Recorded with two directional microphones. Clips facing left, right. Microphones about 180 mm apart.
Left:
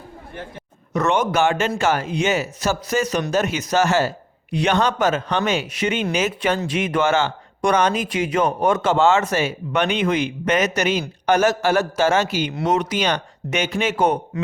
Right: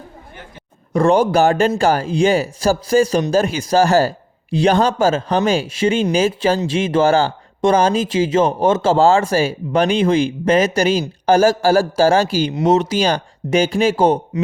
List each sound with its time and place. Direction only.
0.9 s speech: 30° right (ahead or behind)